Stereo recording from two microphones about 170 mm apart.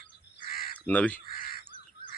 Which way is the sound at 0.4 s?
60° left (ahead or behind).